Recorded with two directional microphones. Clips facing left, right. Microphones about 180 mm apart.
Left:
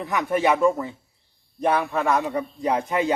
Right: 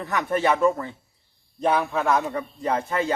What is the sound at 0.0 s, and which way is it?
Speech, 10° left (ahead or behind).